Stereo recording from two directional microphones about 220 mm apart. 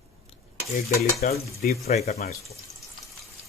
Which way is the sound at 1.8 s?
30° left (ahead or behind).